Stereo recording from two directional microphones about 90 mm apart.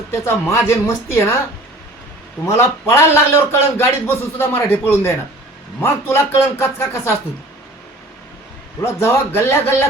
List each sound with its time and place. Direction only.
0.1 s a man's voice: 30° left (ahead or behind)
2.5 s a man's voice: 30° left (ahead or behind)
8.8 s a man's voice: 30° left (ahead or behind)